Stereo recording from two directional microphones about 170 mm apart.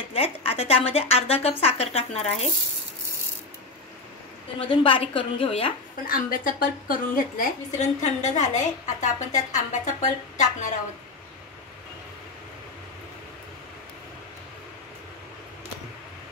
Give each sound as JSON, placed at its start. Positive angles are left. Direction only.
{"t": 0.1, "sound": "a woman's voice", "side_deg": 35}
{"t": 4.6, "sound": "a woman's voice", "side_deg": 30}
{"t": 6.0, "sound": "a woman's voice", "side_deg": 55}